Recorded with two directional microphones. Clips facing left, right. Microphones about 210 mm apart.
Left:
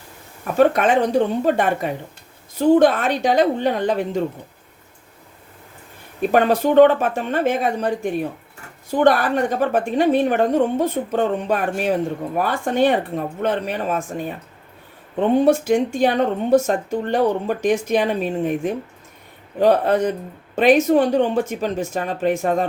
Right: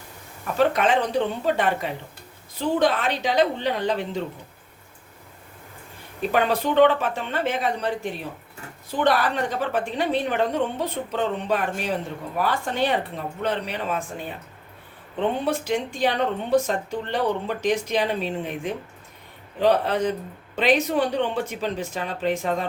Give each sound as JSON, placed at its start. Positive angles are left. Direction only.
{"t": 0.5, "sound": "speech", "side_deg": 50}
{"t": 6.3, "sound": "speech", "side_deg": 45}
{"t": 15.4, "sound": "speech", "side_deg": 45}